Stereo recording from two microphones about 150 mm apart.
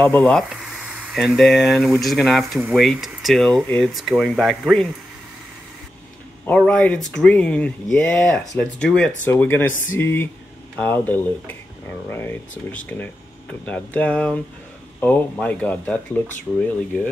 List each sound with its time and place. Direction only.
0.0 s speech: 5° left (ahead or behind)
6.4 s speech: 5° left (ahead or behind)